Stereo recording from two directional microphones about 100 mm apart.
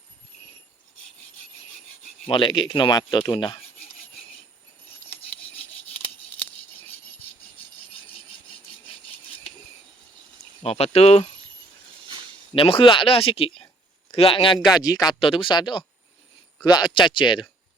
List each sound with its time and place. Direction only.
2.2 s speech: 55° left (ahead or behind)
10.6 s speech: 90° left
12.0 s a sound: 55° right (ahead or behind)
12.5 s speech: 65° left (ahead or behind)
14.8 s speech: 40° left (ahead or behind)
15.2 s speech: 60° left (ahead or behind)